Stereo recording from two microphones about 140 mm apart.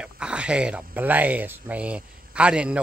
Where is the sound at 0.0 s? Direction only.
5° right (ahead or behind).